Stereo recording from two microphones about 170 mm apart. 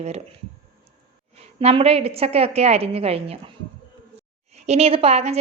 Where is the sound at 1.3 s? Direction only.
35° right (ahead or behind).